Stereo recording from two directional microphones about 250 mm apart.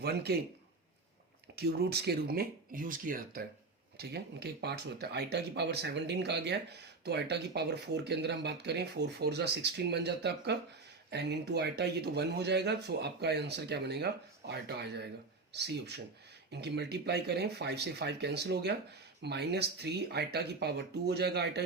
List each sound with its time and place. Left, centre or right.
0.0 s speech: right
1.5 s speech: right